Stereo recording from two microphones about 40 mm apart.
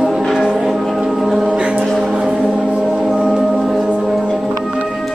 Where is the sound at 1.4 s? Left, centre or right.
Right.